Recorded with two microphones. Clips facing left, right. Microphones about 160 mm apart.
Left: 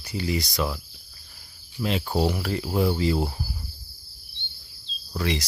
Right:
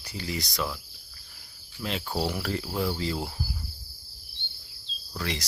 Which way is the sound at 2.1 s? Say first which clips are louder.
Left 5 dB; 20° left (ahead or behind).